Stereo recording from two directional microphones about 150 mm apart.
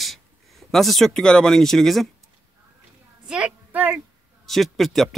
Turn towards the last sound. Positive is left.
turn(degrees=0)  # may be behind; listen again after turning